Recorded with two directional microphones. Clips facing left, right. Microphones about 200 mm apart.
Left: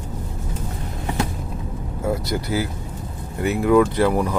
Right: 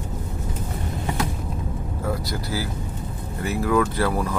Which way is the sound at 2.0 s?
20° left (ahead or behind).